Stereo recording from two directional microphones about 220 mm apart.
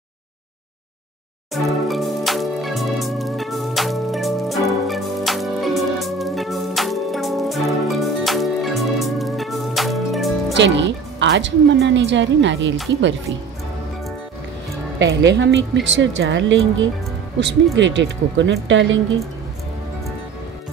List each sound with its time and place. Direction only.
1.5 s music: centre (ahead or behind)
10.5 s speech: 55° right (ahead or behind)
15.0 s speech: 55° right (ahead or behind)